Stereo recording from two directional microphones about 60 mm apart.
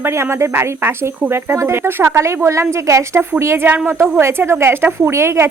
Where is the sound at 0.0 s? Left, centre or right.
Right.